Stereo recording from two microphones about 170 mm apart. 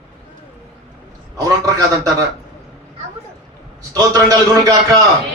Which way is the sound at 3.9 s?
20° right (ahead or behind).